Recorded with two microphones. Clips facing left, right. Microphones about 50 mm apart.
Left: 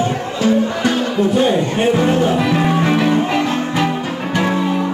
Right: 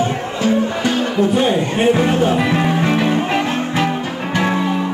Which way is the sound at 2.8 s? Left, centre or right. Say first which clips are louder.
Left 1 dB; centre.